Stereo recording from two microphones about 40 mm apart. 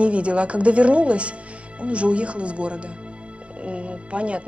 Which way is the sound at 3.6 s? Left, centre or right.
Right.